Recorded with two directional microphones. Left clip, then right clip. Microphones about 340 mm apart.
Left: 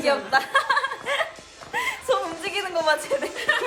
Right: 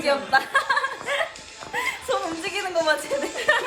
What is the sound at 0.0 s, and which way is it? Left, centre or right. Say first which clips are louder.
Chuckle: even; centre.